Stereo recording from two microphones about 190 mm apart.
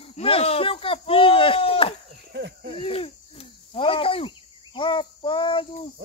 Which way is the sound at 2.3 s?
60° right (ahead or behind).